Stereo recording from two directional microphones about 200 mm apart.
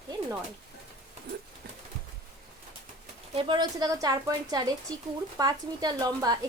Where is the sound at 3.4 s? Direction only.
20° right (ahead or behind).